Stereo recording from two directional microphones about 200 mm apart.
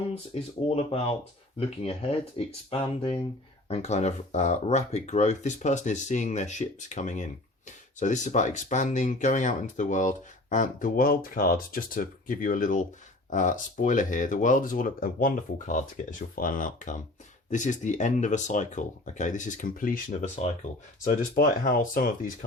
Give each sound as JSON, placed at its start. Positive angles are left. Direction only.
{"t": 0.3, "sound": "speech", "side_deg": 35}